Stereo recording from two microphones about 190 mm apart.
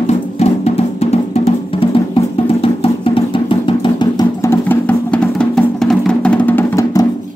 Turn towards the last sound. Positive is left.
turn(degrees=15)  # may be behind; listen again after turning